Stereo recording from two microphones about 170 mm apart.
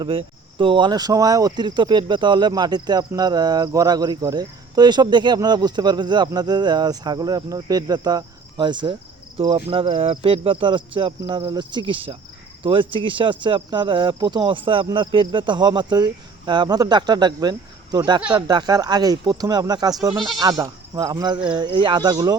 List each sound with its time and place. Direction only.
0.0 s speech: 30° right (ahead or behind)
18.2 s speech: 5° right (ahead or behind)
18.4 s speech: 25° right (ahead or behind)
20.1 s speech: centre (ahead or behind)
20.4 s speech: 25° right (ahead or behind)